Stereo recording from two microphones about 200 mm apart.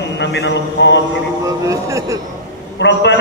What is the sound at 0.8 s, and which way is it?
Mantra, 60° left (ahead or behind).